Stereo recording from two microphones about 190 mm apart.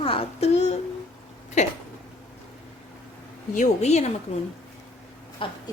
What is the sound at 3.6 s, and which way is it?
Speech, 35° left (ahead or behind).